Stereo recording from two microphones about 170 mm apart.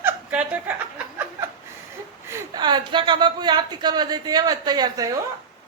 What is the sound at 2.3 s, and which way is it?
Speech, 25° right (ahead or behind).